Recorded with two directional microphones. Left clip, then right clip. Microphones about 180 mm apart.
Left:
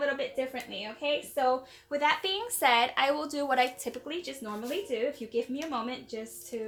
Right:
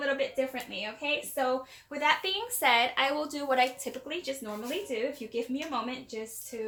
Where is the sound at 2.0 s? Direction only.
35° left (ahead or behind).